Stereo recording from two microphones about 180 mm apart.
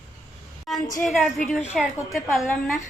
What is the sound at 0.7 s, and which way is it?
A woman's voice, centre (ahead or behind).